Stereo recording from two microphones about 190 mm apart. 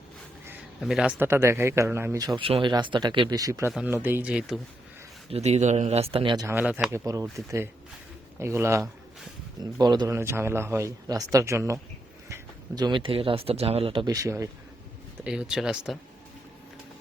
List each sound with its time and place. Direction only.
0.8 s speech: centre (ahead or behind); by 3.7 s 15° right (ahead or behind)
3.7 s speech: 5° right (ahead or behind)
5.3 s speech: 35° right (ahead or behind); by 14.5 s 15° right (ahead or behind)
15.2 s speech: 5° right (ahead or behind)